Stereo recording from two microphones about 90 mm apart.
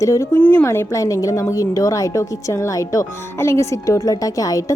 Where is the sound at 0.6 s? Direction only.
35° left (ahead or behind).